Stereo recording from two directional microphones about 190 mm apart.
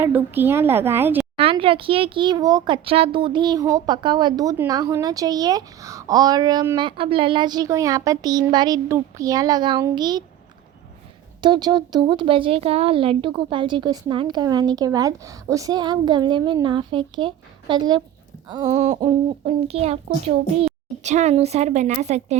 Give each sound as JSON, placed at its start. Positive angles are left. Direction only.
{"t": 0.0, "sound": "a woman's voice", "side_deg": -10}
{"t": 1.4, "sound": "a child's voice", "side_deg": -30}
{"t": 11.3, "sound": "a child's voice", "side_deg": -25}
{"t": 18.9, "sound": "a woman's voice", "side_deg": -30}